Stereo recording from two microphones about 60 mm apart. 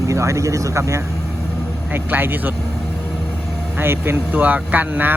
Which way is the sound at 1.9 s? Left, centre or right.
Right.